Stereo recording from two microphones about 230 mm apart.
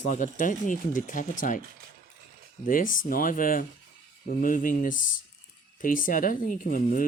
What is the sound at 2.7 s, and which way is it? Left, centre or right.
Speech, left.